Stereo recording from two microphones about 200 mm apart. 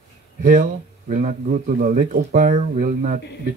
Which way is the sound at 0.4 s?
40° right (ahead or behind).